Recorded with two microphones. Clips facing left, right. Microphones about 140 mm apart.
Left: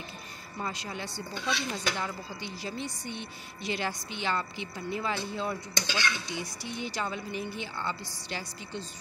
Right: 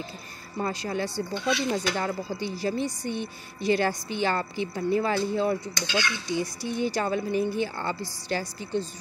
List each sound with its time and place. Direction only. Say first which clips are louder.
0.6 s speech: right 8 dB; 40° right (ahead or behind)